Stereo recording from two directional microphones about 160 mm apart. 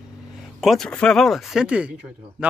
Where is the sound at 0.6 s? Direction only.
Centre (ahead or behind).